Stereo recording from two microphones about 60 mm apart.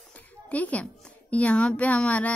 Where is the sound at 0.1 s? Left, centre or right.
Left.